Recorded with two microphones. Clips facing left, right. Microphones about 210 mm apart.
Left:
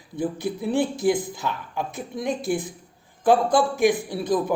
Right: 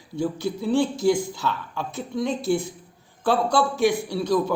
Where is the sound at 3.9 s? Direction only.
55° left (ahead or behind).